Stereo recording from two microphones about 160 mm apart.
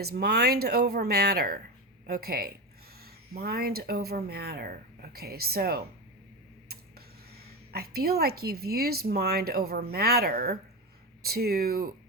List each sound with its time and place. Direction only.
0.0 s speech: 75° right (ahead or behind)
7.7 s speech: 75° right (ahead or behind)